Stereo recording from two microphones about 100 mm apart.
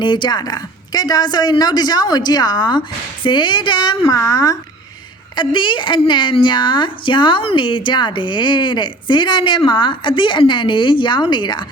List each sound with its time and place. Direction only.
0.0 s speech: 50° left (ahead or behind)
4.0 s speech: 35° left (ahead or behind)
5.4 s speech: 55° left (ahead or behind)